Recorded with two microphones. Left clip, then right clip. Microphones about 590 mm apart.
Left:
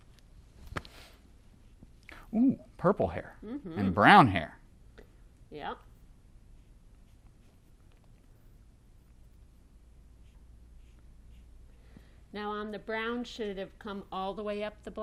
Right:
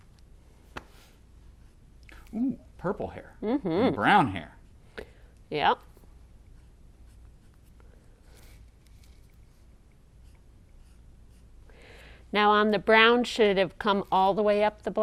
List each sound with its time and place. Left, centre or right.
2.0 s speech: left
3.4 s speech: right
3.9 s speech: left
5.5 s speech: right
12.3 s speech: right